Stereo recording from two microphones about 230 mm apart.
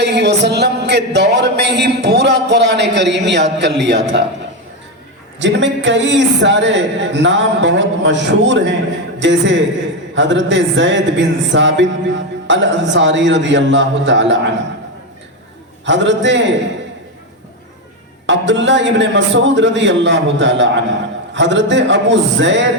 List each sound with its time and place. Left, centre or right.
0.0 s speech: right
5.4 s a man's voice: right
15.9 s speech: right
18.3 s speech: right